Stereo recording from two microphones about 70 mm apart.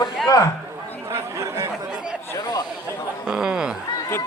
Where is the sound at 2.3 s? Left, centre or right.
Left.